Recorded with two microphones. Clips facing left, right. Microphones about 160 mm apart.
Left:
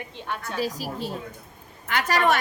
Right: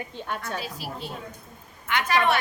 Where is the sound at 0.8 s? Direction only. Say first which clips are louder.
Left 4 dB; 40° left (ahead or behind).